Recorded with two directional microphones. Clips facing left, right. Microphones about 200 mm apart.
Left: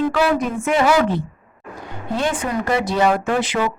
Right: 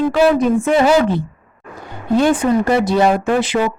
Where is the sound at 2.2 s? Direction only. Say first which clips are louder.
Right 8 dB; 30° right (ahead or behind).